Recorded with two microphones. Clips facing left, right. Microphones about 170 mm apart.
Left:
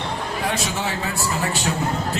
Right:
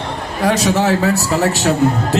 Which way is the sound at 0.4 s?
90° right.